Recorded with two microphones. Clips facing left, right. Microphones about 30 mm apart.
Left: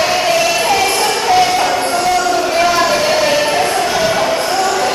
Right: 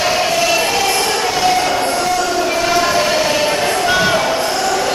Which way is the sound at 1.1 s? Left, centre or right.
Centre.